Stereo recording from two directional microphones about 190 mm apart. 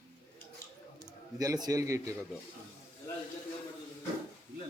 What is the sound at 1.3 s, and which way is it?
Speech, 20° right (ahead or behind).